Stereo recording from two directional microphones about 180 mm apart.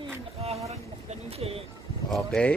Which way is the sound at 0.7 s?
35° right (ahead or behind).